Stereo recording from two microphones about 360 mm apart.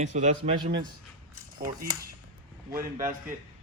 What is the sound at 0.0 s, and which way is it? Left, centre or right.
A man's voice, centre.